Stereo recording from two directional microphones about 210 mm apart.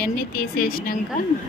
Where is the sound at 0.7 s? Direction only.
45° left (ahead or behind).